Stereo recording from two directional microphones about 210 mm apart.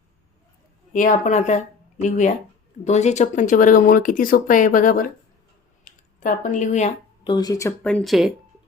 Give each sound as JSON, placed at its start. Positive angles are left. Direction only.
{"t": 0.9, "sound": "speech", "side_deg": 40}
{"t": 7.3, "sound": "speech", "side_deg": 20}
{"t": 7.8, "sound": "speech", "side_deg": 5}